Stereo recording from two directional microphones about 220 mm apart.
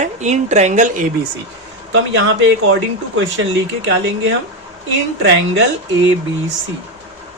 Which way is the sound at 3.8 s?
55° right (ahead or behind).